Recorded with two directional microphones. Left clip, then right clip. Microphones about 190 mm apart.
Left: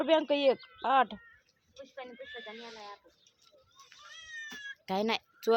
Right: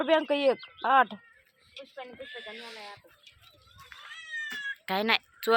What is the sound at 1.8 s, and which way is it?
Speech, 40° right (ahead or behind).